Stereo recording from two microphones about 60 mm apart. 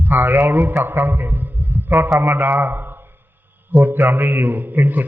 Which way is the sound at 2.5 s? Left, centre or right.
Right.